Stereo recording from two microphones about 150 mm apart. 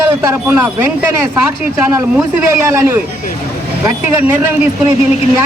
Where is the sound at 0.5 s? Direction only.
10° right (ahead or behind).